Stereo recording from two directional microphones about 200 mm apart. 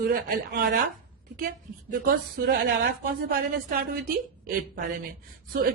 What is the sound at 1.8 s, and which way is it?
A woman's voice, 45° right (ahead or behind).